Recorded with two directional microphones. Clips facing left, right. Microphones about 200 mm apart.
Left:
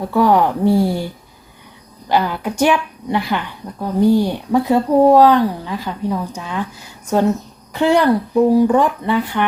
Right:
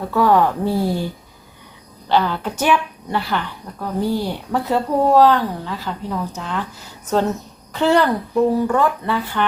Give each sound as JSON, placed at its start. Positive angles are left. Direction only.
{"t": 0.1, "sound": "speech", "side_deg": 15}
{"t": 7.7, "sound": "speech", "side_deg": 15}